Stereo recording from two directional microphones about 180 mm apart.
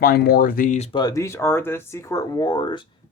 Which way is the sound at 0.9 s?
20° left (ahead or behind).